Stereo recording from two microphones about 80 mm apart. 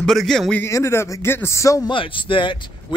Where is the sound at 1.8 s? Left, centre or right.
Left.